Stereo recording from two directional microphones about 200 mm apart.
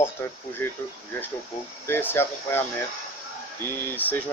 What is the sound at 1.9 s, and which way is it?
Speech, 10° left (ahead or behind).